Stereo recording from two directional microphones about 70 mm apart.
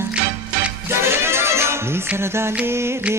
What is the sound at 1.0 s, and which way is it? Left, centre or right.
Music, right.